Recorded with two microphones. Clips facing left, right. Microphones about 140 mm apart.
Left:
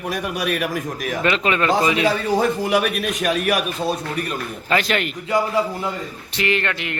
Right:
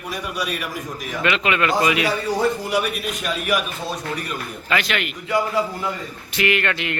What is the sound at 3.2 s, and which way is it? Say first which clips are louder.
Speech: left 5 dB; 50° left (ahead or behind).